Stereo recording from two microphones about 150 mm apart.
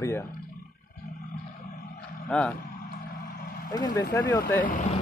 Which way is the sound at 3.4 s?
90° left.